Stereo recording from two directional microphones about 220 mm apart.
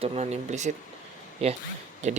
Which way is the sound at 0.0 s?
30° right (ahead or behind).